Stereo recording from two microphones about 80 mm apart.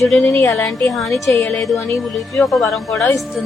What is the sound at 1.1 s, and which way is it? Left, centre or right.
Speech, left.